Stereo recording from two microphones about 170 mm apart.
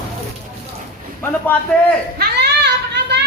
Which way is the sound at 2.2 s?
75° right (ahead or behind).